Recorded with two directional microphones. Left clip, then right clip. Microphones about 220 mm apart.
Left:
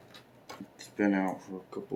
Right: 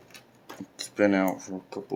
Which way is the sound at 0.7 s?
50° right (ahead or behind).